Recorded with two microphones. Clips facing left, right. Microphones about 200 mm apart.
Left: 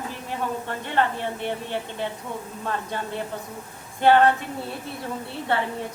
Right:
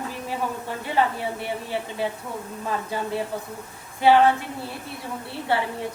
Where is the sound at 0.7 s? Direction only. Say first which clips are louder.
Right 2 dB; 5° right (ahead or behind).